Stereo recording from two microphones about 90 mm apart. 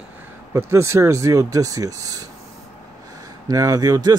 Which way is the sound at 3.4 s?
45° right (ahead or behind).